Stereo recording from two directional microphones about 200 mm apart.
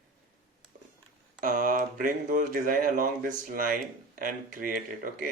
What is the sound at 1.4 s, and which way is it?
Speech, 45° right (ahead or behind).